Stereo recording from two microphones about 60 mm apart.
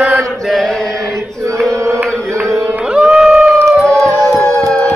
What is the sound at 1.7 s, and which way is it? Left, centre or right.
Mantra, right.